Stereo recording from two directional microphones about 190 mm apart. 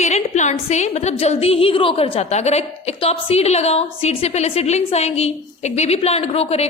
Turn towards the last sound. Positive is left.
turn(degrees=30)  # may be behind; listen again after turning